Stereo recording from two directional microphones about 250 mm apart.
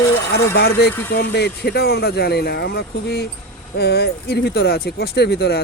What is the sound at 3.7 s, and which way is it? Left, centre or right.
Speech, left.